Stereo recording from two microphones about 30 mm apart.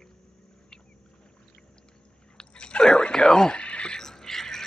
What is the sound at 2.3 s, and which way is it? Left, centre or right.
Chewing, left.